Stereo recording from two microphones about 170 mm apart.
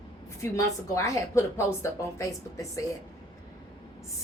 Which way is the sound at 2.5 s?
20° left (ahead or behind).